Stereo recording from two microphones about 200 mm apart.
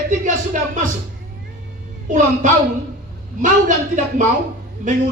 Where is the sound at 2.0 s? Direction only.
40° right (ahead or behind).